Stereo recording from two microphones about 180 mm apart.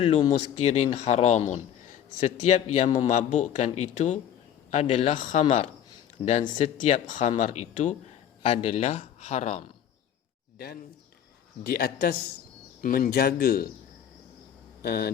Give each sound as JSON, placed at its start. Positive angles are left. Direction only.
{"t": 0.0, "sound": "speech", "side_deg": 40}
{"t": 11.6, "sound": "speech", "side_deg": 55}
{"t": 14.8, "sound": "speech", "side_deg": 60}